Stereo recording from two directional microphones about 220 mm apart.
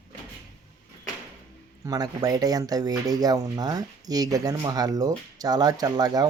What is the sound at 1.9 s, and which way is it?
Speech, 15° right (ahead or behind).